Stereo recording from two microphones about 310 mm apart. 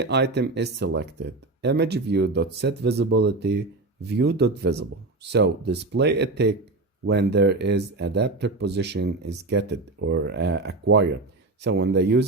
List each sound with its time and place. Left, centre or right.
0.0 s speech: right